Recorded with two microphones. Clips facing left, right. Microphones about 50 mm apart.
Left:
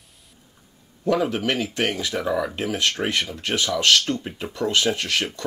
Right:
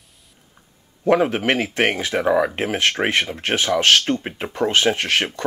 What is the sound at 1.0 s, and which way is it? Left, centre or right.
Speech, right.